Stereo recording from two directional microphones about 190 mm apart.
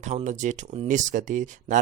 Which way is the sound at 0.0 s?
35° right (ahead or behind).